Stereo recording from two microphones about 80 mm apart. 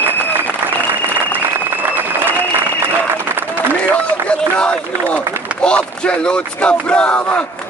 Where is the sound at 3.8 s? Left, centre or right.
Centre.